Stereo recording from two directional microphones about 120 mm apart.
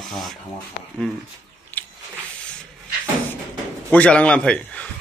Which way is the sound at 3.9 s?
10° left (ahead or behind).